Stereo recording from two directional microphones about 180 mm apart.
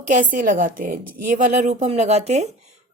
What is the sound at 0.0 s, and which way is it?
A woman's voice, 45° right (ahead or behind).